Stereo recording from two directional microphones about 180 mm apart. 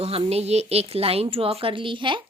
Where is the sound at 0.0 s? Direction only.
35° right (ahead or behind).